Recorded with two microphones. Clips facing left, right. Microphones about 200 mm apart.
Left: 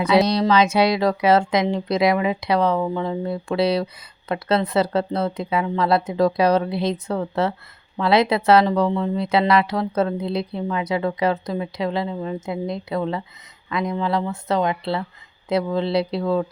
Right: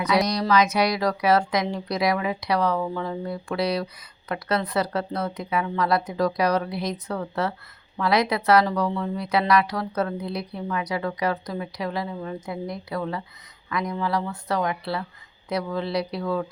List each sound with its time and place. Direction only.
0.0 s speech: 30° left (ahead or behind)